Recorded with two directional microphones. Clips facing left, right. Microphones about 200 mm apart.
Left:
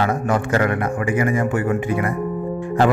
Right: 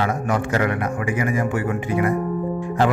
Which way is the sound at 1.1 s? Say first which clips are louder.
Left 3 dB; 55° left (ahead or behind).